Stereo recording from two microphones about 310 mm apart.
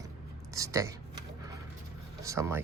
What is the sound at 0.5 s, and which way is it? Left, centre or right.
Speech, centre.